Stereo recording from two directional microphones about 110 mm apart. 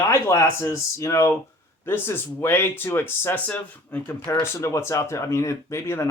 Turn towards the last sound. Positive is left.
turn(degrees=25)  # may be behind; listen again after turning